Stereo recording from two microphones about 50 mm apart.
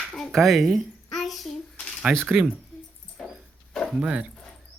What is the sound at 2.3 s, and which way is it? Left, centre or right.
Speech, centre.